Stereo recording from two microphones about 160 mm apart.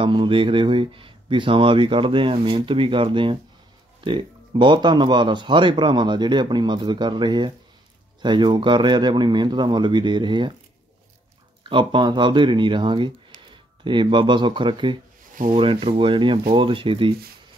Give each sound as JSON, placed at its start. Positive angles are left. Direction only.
{"t": 0.0, "sound": "speech", "side_deg": -30}
{"t": 11.7, "sound": "speech", "side_deg": -30}